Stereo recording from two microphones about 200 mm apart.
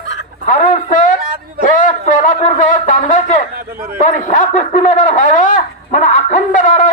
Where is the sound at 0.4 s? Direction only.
40° left (ahead or behind).